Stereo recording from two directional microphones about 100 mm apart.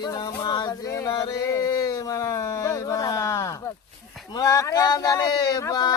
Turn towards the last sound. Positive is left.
turn(degrees=35)  # may be behind; listen again after turning